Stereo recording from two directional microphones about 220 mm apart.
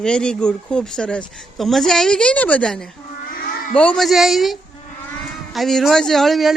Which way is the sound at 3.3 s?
40° left (ahead or behind).